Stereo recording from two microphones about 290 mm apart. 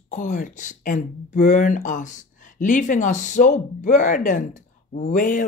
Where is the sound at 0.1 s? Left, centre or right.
Left.